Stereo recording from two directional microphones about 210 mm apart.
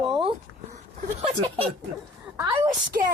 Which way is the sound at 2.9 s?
45° right (ahead or behind).